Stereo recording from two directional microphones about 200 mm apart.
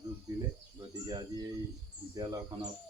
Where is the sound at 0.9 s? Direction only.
20° right (ahead or behind).